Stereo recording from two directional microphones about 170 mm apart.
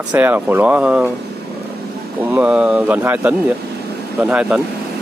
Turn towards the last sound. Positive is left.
turn(degrees=-5)  # may be behind; listen again after turning